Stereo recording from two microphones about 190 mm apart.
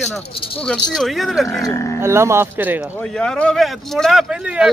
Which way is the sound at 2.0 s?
15° right (ahead or behind).